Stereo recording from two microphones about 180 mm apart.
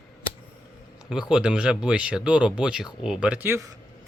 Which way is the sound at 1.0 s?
5° right (ahead or behind).